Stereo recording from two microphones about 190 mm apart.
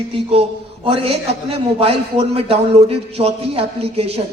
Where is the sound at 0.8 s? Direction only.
30° right (ahead or behind).